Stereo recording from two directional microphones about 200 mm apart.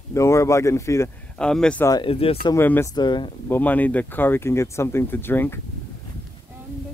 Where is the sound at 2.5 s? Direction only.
10° left (ahead or behind).